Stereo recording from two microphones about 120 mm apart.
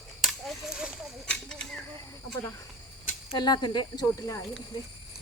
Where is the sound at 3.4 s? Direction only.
35° left (ahead or behind).